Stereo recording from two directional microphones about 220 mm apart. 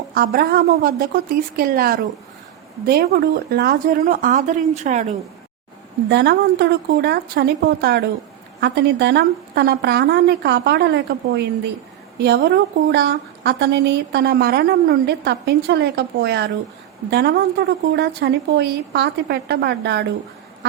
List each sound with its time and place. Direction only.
0.1 s a woman's voice: 45° right (ahead or behind)
6.1 s a woman's voice: 50° right (ahead or behind)